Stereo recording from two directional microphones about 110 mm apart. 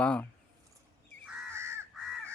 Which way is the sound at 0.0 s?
10° left (ahead or behind).